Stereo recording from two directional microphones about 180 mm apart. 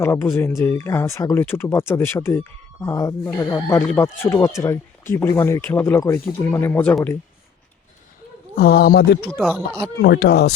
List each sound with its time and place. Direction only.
0.0 s speech: 15° left (ahead or behind)
8.5 s speech: 60° left (ahead or behind)
9.3 s speech: 5° right (ahead or behind)
10.0 s speech: 65° left (ahead or behind)